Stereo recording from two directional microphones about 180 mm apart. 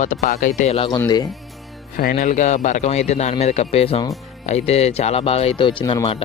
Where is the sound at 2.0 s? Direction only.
50° left (ahead or behind).